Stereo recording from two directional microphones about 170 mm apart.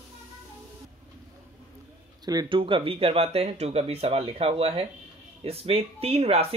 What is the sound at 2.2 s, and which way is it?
Speech, 25° right (ahead or behind).